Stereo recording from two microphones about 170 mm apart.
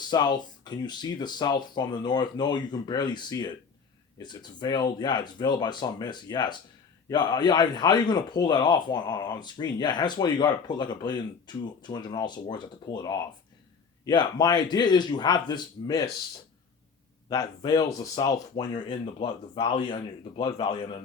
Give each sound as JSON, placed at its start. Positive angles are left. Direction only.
{"t": 0.1, "sound": "a man's voice", "side_deg": 25}
{"t": 17.2, "sound": "a man's voice", "side_deg": 20}